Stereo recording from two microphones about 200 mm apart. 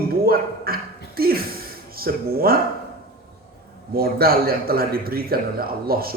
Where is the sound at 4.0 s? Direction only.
50° right (ahead or behind).